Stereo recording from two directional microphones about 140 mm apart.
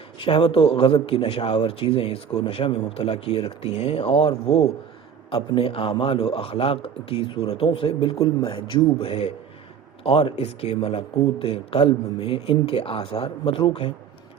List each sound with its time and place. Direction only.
0.2 s a man's voice: 35° left (ahead or behind)